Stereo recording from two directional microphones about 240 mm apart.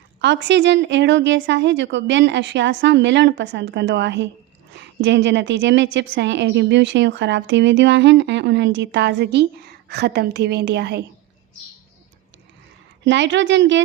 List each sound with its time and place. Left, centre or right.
0.2 s a woman's voice: right
13.1 s a woman's voice: right